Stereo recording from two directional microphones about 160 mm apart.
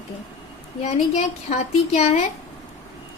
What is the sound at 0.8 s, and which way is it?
A woman's voice, 45° left (ahead or behind).